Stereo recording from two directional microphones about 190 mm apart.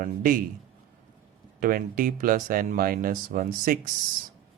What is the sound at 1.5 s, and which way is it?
Speech, 50° right (ahead or behind).